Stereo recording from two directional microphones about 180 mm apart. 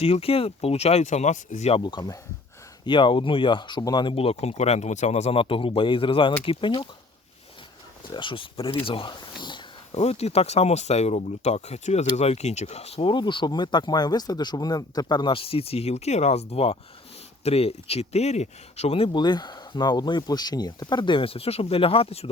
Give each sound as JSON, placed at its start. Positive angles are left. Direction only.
{"t": 0.0, "sound": "speech", "side_deg": 35}
{"t": 1.8, "sound": "speech", "side_deg": 25}
{"t": 8.1, "sound": "speech", "side_deg": 25}
{"t": 9.9, "sound": "speech", "side_deg": 35}